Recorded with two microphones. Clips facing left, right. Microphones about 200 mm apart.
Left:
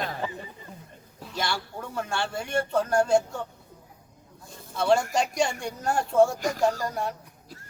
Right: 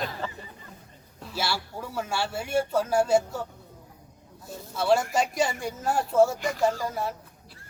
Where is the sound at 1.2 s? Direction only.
5° right (ahead or behind).